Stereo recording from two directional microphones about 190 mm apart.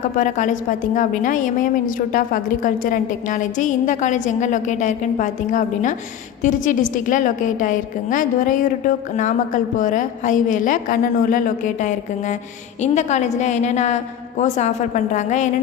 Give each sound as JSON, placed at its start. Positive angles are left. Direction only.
{"t": 0.2, "sound": "a woman's voice", "side_deg": 40}